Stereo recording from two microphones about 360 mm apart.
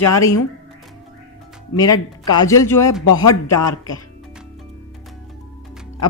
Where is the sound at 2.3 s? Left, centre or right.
Centre.